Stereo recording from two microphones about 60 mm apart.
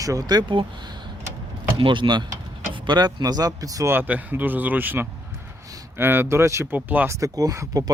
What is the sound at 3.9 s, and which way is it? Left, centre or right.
Speech, right.